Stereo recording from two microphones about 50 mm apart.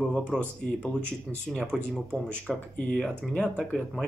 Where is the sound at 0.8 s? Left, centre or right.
Centre.